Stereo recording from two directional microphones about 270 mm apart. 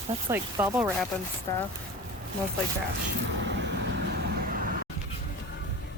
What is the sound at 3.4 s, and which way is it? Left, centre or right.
Vehicle, right.